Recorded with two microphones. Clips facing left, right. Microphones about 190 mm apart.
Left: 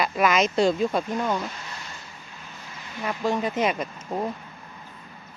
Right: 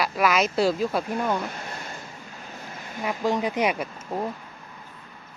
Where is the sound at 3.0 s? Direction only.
15° right (ahead or behind).